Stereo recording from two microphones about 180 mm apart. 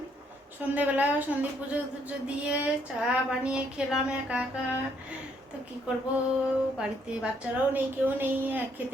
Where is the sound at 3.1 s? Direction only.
5° right (ahead or behind).